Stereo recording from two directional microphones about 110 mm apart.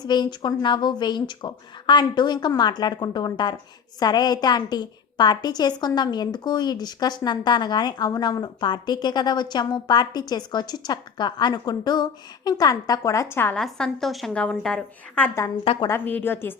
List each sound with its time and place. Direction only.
0.0 s a woman's voice: 40° left (ahead or behind)
13.3 s a woman's voice: 20° left (ahead or behind)
13.6 s a woman's voice: 5° left (ahead or behind)
15.6 s a woman's voice: 60° left (ahead or behind)
15.9 s a woman's voice: 15° left (ahead or behind)